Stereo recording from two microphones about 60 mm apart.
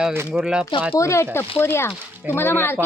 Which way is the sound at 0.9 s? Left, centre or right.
Left.